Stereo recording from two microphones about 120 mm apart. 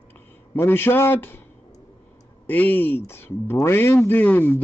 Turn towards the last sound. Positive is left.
turn(degrees=15)  # may be behind; listen again after turning